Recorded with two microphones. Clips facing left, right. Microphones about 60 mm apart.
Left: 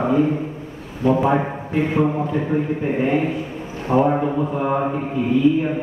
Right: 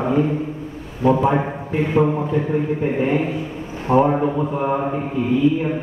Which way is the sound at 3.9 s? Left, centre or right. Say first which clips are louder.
Right 1 dB; centre.